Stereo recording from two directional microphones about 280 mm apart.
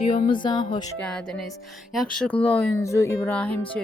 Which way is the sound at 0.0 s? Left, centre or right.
Centre.